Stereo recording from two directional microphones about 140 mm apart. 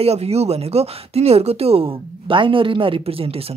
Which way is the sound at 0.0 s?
45° right (ahead or behind).